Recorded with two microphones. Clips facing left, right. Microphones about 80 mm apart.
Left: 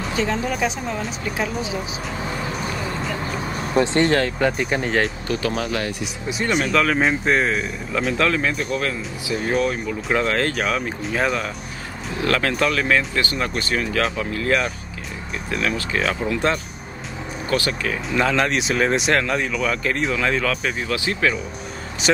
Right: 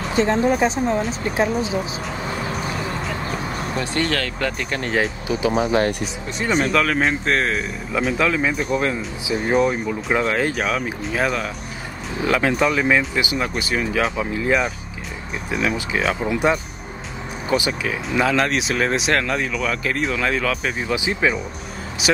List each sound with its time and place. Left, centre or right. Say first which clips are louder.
0.1 s speech: right 6 dB; right
3.7 s speech: left 7 dB; left
4.5 s speech: left 3 dB; centre
4.9 s speech: even; centre
5.5 s speech: right 6 dB; right
6.4 s speech: right 1 dB; centre
20.8 s speech: right 2 dB; centre